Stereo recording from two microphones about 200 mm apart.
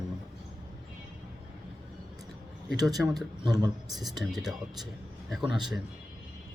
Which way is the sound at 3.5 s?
20° right (ahead or behind).